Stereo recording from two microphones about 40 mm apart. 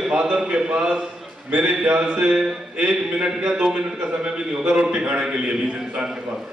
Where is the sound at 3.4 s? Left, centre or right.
Right.